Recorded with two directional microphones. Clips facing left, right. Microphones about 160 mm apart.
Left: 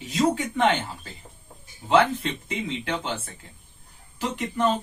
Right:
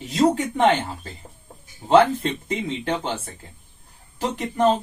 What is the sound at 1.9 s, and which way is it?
Speech, 35° right (ahead or behind).